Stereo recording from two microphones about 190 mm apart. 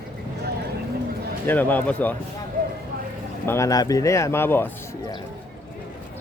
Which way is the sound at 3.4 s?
15° left (ahead or behind).